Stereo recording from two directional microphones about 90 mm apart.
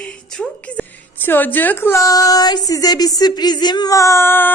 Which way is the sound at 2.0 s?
40° left (ahead or behind).